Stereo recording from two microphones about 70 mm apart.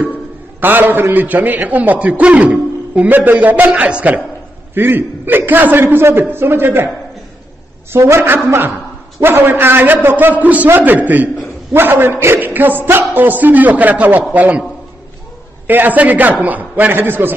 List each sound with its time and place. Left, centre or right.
0.6 s a man's voice: right
7.9 s a man's voice: right
9.2 s a man's voice: right
15.6 s speech: right